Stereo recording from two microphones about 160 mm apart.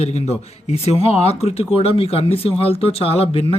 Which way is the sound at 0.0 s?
40° left (ahead or behind).